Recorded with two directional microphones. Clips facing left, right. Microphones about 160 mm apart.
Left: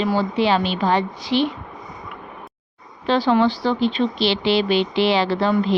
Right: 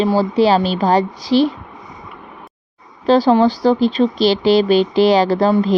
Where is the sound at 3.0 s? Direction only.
40° right (ahead or behind).